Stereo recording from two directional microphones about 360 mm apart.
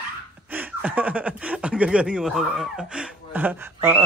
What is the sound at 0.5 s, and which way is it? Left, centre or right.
Speech, centre.